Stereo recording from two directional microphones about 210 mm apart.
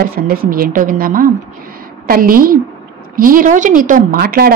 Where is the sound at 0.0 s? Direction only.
45° right (ahead or behind).